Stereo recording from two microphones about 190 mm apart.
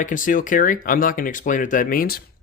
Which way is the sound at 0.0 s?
45° left (ahead or behind).